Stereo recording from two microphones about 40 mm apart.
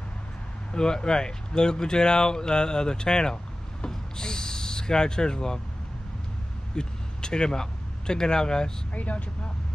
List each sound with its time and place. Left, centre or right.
0.7 s speech: centre
3.8 s owl: centre
6.7 s speech: centre
8.9 s speech: left